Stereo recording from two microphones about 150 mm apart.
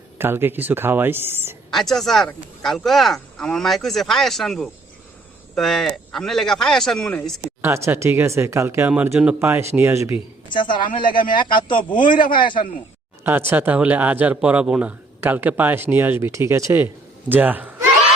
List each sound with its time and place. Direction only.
0.2 s speech: 15° right (ahead or behind)
1.7 s speech: centre (ahead or behind)
7.6 s speech: 15° right (ahead or behind)
10.5 s speech: 30° left (ahead or behind)
13.2 s speech: 15° right (ahead or behind)